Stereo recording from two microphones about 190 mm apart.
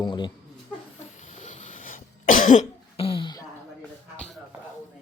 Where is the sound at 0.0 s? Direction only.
25° left (ahead or behind).